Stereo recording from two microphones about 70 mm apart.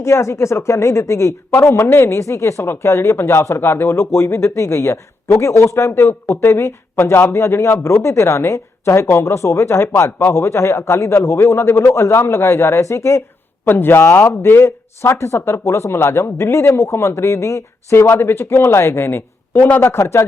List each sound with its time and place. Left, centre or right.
0.0 s a man's voice: left
13.7 s a man's voice: left